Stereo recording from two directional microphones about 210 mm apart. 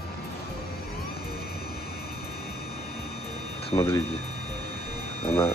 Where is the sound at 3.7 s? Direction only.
20° left (ahead or behind).